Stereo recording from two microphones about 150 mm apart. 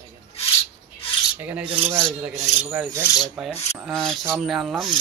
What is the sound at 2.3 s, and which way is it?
Speech, 50° right (ahead or behind).